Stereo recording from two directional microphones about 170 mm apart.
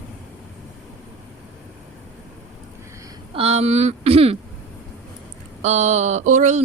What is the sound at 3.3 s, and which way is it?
Speech, 40° right (ahead or behind).